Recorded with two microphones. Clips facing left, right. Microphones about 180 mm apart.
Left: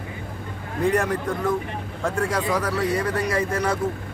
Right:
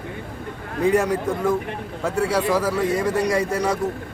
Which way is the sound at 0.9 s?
10° right (ahead or behind).